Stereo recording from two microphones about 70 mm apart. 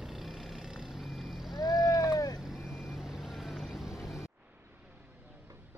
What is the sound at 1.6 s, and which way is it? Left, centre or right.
Boat, left.